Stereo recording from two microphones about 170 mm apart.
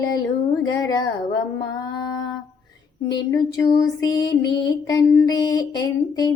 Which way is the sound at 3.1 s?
20° left (ahead or behind).